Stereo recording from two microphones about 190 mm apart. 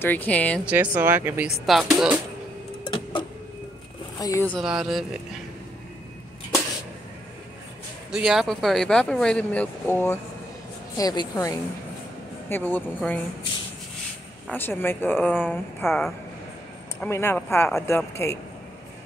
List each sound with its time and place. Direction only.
0.0 s speech: 10° left (ahead or behind)
0.7 s speech: 10° right (ahead or behind)
1.7 s speech: centre (ahead or behind)
4.2 s speech: 15° left (ahead or behind)
4.6 s speech: centre (ahead or behind)
8.1 s a woman's voice: centre (ahead or behind)
14.5 s speech: 10° left (ahead or behind)
17.0 s speech: 10° left (ahead or behind)